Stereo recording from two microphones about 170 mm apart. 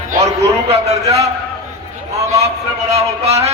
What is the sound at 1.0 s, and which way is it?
Speech, 20° right (ahead or behind).